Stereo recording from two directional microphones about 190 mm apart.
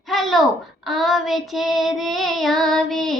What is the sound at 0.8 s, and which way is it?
Child singing, centre (ahead or behind).